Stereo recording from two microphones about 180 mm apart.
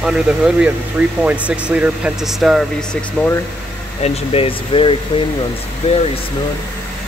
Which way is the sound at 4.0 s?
30° left (ahead or behind).